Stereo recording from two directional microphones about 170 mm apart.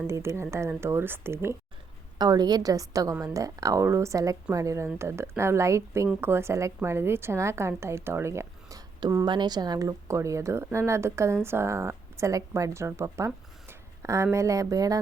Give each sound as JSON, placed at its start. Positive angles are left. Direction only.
{"t": 0.1, "sound": "a woman's voice", "side_deg": -15}